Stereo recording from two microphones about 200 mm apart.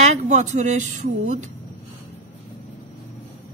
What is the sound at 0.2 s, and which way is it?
A woman's voice, 35° right (ahead or behind).